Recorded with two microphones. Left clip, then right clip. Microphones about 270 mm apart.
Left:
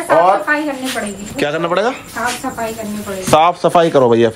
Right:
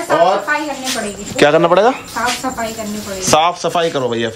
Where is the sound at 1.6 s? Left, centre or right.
Centre.